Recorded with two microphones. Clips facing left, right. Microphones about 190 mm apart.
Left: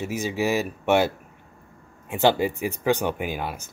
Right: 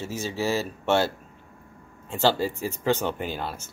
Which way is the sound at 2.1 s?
15° left (ahead or behind).